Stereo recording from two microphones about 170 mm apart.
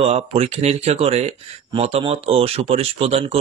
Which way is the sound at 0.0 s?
40° right (ahead or behind).